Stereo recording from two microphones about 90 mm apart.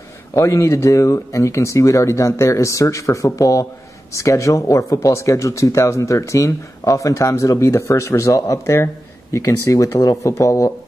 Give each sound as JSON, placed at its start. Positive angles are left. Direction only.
{"t": 0.3, "sound": "speech", "side_deg": 35}